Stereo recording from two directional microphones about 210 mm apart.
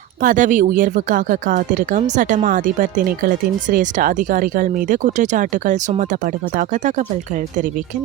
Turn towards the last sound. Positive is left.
turn(degrees=-35)  # may be behind; listen again after turning